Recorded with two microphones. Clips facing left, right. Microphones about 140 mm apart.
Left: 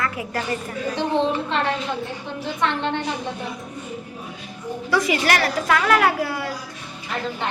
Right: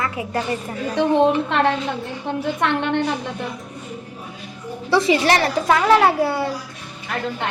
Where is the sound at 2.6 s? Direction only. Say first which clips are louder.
Right 1 dB; 60° right (ahead or behind).